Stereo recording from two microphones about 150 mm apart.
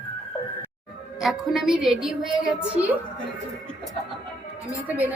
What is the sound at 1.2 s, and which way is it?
A woman's voice, centre (ahead or behind).